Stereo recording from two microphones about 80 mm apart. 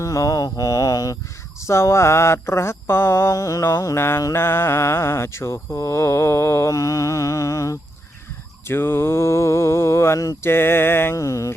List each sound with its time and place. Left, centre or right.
0.0 s mantra: left
1.6 s speech: left
8.6 s speech: left